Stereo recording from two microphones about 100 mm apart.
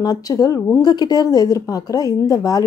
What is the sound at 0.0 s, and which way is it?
Speech, 40° left (ahead or behind).